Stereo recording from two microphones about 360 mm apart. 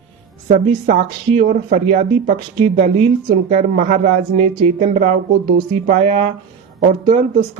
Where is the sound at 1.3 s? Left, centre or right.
Centre.